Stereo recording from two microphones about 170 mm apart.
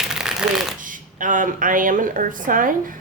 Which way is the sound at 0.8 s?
50° right (ahead or behind).